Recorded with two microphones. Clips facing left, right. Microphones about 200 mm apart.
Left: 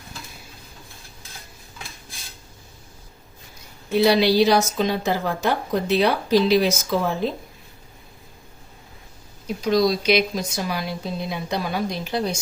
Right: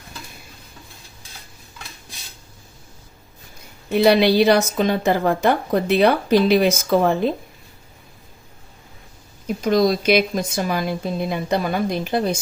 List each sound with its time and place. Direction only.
3.8 s speech: 60° right (ahead or behind)
9.6 s speech: 50° right (ahead or behind)